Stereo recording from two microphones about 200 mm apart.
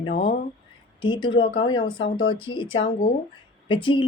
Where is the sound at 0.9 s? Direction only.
25° left (ahead or behind).